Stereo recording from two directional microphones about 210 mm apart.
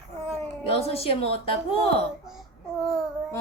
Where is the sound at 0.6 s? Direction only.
30° left (ahead or behind).